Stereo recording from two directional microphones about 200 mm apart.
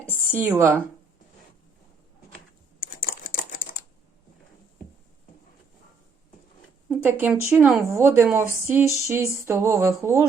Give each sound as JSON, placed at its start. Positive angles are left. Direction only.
{"t": 0.2, "sound": "speech", "side_deg": -10}
{"t": 2.8, "sound": "crumpling", "side_deg": 45}
{"t": 6.8, "sound": "speech", "side_deg": -10}